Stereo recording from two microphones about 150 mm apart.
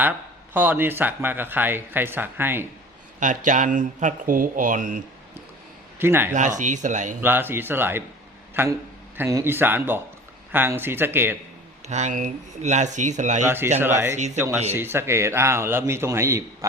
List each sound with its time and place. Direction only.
0.5 s a man's voice: 10° right (ahead or behind)
3.2 s speech: 55° right (ahead or behind)
6.0 s a man's voice: 15° right (ahead or behind)
6.6 s speech: 55° right (ahead or behind)
7.2 s a man's voice: 15° right (ahead or behind)
11.9 s speech: 50° right (ahead or behind)
13.4 s a man's voice: 15° right (ahead or behind)